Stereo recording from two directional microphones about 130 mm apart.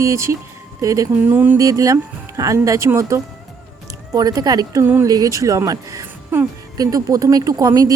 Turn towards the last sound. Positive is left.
turn(degrees=-25)  # may be behind; listen again after turning